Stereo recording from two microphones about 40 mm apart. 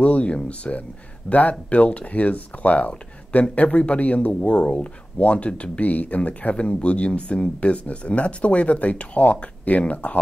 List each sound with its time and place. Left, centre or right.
0.0 s speech: left
4.3 s speech: left